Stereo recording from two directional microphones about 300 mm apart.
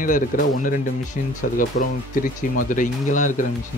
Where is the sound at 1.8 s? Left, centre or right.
Left.